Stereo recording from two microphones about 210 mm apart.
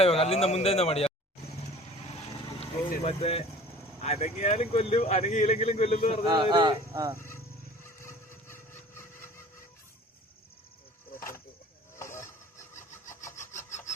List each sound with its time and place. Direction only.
0.0 s a man's voice: 30° left (ahead or behind)
2.6 s speech: 30° left (ahead or behind)
6.2 s speech: 20° right (ahead or behind)
7.2 s vehicle: 15° left (ahead or behind)
7.9 s a sound: 10° left (ahead or behind)
11.9 s wood: 15° left (ahead or behind)